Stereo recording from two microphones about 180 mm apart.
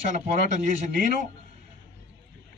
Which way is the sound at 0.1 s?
45° right (ahead or behind).